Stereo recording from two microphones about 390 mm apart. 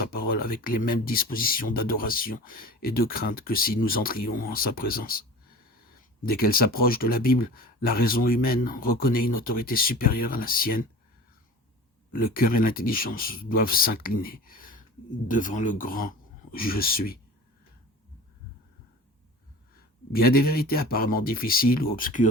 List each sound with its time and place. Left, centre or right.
0.1 s speech: left
6.2 s speech: left
12.1 s speech: left
20.1 s speech: left